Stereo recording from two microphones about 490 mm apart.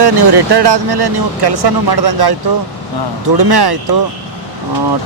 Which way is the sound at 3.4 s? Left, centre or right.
Right.